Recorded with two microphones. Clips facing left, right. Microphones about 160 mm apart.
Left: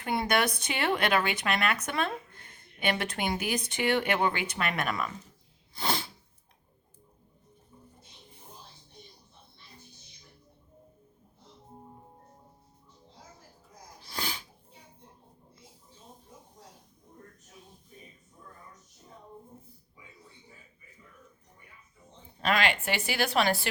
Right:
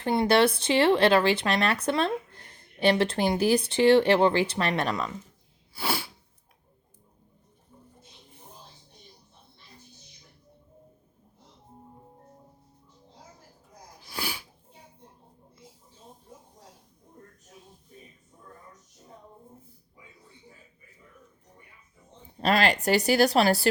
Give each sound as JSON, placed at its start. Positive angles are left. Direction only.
{"t": 0.0, "sound": "speech", "side_deg": -30}
{"t": 5.7, "sound": "sneeze", "side_deg": -10}
{"t": 14.1, "sound": "sneeze", "side_deg": -10}
{"t": 22.4, "sound": "speech", "side_deg": -35}